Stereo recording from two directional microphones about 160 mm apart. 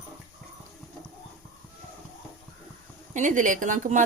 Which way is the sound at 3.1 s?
50° right (ahead or behind).